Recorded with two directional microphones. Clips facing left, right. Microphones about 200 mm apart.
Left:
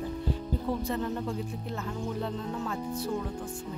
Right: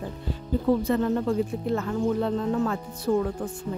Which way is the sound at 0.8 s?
85° right.